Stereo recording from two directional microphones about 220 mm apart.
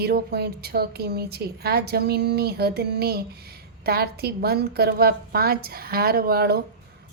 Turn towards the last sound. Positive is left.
turn(degrees=-45)  # may be behind; listen again after turning